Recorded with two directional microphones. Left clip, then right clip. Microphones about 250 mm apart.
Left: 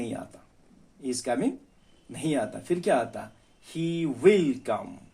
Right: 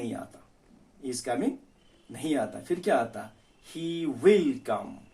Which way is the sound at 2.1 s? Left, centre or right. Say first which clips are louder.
Left 1 dB; left.